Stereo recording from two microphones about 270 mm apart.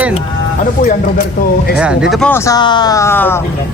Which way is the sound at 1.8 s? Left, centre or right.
Centre.